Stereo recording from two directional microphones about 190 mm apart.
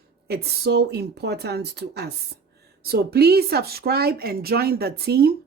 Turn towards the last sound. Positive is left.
turn(degrees=-55)  # may be behind; listen again after turning